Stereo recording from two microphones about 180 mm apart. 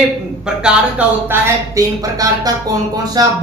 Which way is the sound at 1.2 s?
15° right (ahead or behind).